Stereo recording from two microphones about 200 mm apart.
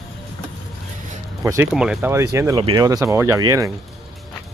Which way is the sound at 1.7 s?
5° right (ahead or behind).